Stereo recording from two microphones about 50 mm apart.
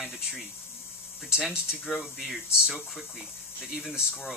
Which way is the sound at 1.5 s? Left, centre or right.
Centre.